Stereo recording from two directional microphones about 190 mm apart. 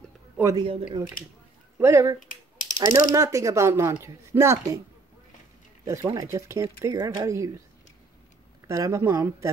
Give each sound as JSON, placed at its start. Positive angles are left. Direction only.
{"t": 0.4, "sound": "speech", "side_deg": -15}
{"t": 0.7, "sound": "speech", "side_deg": -30}
{"t": 1.8, "sound": "speech", "side_deg": -15}
{"t": 2.1, "sound": "a sound", "side_deg": 45}
{"t": 3.2, "sound": "speech", "side_deg": -15}
{"t": 5.9, "sound": "speech", "side_deg": -15}
{"t": 8.6, "sound": "speech", "side_deg": -15}